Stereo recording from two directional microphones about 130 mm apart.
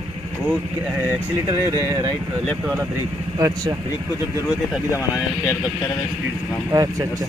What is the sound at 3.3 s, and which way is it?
Speech, 25° right (ahead or behind).